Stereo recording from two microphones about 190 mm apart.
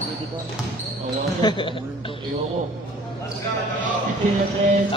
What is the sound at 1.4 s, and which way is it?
Speech, 20° left (ahead or behind).